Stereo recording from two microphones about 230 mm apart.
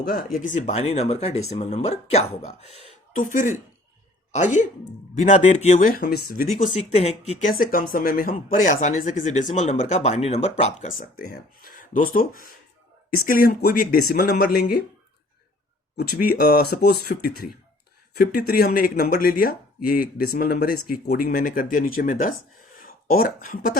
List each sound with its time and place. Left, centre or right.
0.0 s a woman's voice: left
6.6 s speech: left
16.0 s speech: left